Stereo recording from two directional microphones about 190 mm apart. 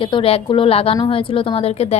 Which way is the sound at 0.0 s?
30° left (ahead or behind).